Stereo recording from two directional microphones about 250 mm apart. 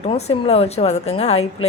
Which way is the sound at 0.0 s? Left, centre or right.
Left.